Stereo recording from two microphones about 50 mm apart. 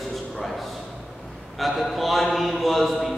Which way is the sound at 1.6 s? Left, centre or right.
Centre.